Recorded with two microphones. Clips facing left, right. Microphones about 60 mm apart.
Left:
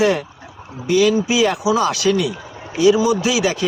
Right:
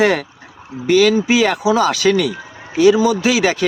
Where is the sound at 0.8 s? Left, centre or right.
Right.